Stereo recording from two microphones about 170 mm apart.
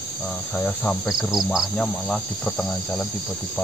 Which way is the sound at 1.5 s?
Centre (ahead or behind).